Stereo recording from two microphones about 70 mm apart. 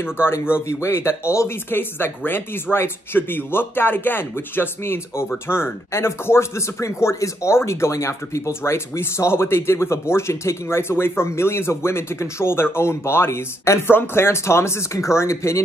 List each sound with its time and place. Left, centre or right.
0.0 s speech: left
1.7 s speech: left